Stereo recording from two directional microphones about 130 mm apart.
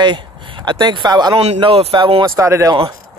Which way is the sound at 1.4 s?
50° right (ahead or behind).